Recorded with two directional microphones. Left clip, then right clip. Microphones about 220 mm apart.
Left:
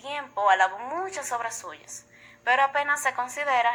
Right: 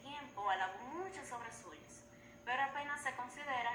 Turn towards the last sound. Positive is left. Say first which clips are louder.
# left 16 dB
turn(degrees=55)  # may be behind; listen again after turning